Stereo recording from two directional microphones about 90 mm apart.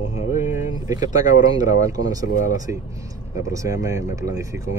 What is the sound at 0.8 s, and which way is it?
Speech, 45° right (ahead or behind).